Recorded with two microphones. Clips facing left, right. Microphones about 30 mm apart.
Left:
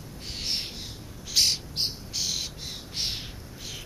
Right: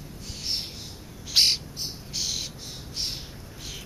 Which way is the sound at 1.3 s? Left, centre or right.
Right.